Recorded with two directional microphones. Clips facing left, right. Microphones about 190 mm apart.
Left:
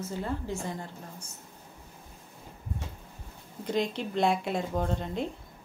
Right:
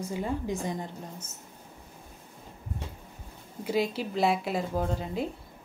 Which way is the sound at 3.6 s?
5° right (ahead or behind).